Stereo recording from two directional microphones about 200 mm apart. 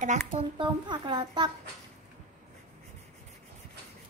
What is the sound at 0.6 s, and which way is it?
Speech, 20° right (ahead or behind).